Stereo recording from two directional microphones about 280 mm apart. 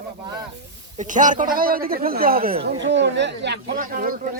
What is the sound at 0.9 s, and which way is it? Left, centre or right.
A man's voice, right.